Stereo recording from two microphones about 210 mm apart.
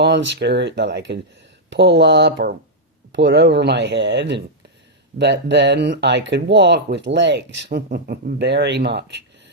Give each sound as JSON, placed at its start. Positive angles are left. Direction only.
{"t": 0.0, "sound": "speech", "side_deg": -55}